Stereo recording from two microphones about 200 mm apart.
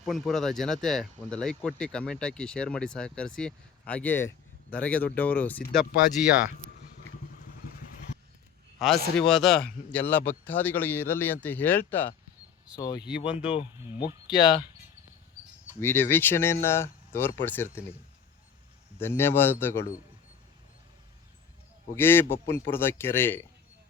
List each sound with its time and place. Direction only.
0.0 s speech: centre (ahead or behind)
8.8 s speech: centre (ahead or behind)
12.6 s speech: 20° left (ahead or behind)
15.8 s speech: 10° left (ahead or behind)
18.9 s speech: 10° left (ahead or behind)
21.9 s speech: 10° left (ahead or behind)